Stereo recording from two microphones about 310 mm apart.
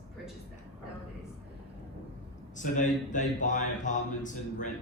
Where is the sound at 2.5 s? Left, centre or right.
Left.